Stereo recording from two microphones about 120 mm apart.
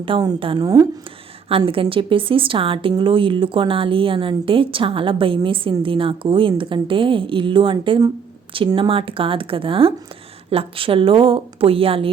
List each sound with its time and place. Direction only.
0.0 s speech: 45° right (ahead or behind)
0.6 s speech: 30° right (ahead or behind)
1.5 s speech: 50° right (ahead or behind)